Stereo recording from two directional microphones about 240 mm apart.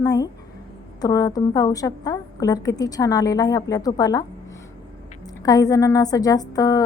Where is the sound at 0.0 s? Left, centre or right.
Centre.